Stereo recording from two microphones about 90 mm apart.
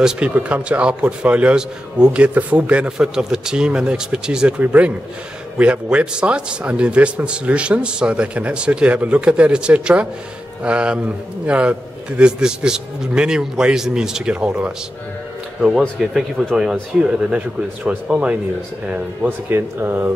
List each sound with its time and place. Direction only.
0.0 s speech: 10° right (ahead or behind)
16.0 s speech: centre (ahead or behind)
19.2 s speech: 25° right (ahead or behind)